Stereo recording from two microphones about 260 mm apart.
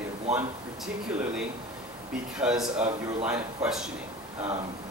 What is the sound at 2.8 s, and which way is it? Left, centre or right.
Speech, right.